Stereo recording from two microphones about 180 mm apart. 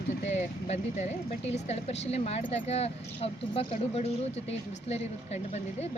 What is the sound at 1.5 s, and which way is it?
Speech, 35° left (ahead or behind).